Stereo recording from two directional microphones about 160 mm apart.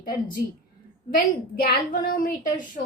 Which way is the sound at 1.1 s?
65° left (ahead or behind).